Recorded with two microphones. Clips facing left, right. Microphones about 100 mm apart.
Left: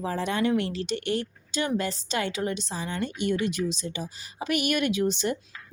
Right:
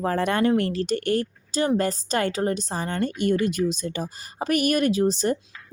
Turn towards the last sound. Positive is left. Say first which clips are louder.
# right 4 dB
turn(degrees=-40)  # may be behind; listen again after turning